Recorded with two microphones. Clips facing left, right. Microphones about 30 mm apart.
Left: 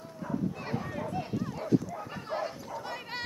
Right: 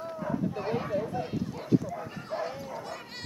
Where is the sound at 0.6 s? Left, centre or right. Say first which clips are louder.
Right 6 dB; centre.